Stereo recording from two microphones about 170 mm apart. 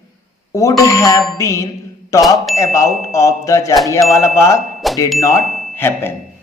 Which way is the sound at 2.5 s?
15° left (ahead or behind).